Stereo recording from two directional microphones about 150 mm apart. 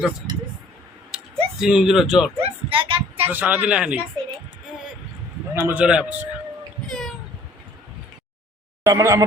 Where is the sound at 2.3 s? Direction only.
40° right (ahead or behind).